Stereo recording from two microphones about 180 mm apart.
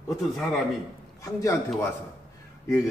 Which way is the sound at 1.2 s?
20° left (ahead or behind).